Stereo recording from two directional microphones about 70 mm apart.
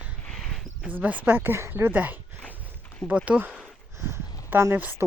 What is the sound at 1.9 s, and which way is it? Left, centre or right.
Speech, right.